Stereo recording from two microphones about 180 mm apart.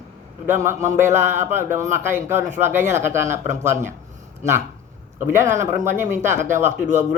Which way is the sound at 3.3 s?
40° right (ahead or behind).